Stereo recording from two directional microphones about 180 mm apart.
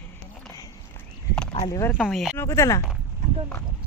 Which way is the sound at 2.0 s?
Centre (ahead or behind).